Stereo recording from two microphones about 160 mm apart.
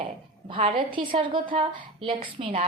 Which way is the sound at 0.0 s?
35° right (ahead or behind).